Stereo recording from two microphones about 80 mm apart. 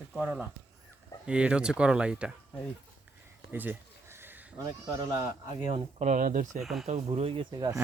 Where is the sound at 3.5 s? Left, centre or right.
Right.